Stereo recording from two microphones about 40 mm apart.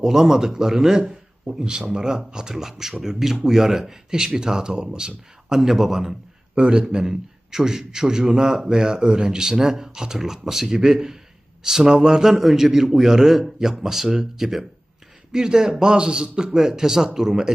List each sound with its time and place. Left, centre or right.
0.0 s a man's voice: centre
5.5 s a man's voice: centre
6.6 s a man's voice: right
12.3 s a man's voice: centre